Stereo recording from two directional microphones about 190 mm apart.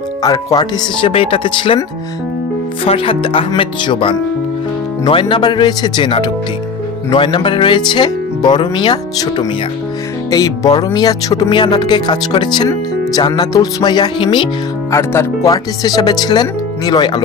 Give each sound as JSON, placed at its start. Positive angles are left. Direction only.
{"t": 0.2, "sound": "speech", "side_deg": 20}